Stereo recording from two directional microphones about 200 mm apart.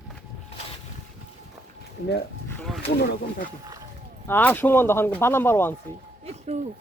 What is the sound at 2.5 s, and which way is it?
Speech, 5° left (ahead or behind).